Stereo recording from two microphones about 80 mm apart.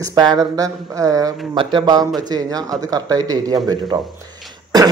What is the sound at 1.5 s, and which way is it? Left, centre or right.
Speech, right.